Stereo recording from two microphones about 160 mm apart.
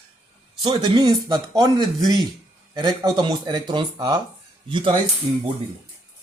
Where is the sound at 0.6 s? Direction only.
30° right (ahead or behind).